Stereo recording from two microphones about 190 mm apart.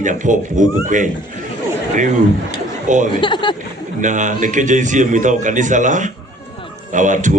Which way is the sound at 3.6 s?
40° right (ahead or behind).